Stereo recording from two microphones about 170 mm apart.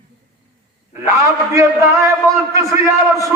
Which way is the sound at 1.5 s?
20° right (ahead or behind).